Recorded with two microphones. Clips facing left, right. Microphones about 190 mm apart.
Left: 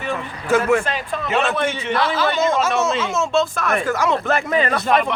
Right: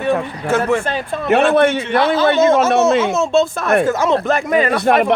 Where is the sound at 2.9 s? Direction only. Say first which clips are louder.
Right 8 dB; 65° right (ahead or behind).